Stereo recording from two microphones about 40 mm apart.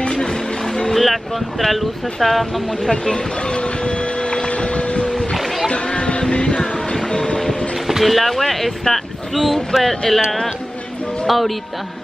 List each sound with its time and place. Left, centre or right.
0.0 s music: left
0.9 s speech: centre
2.9 s printer: left
5.1 s splash: centre
5.7 s a sound: left
6.3 s music: left
6.6 s music: centre
7.4 s boat: centre
9.8 s speech: centre
11.2 s speech: centre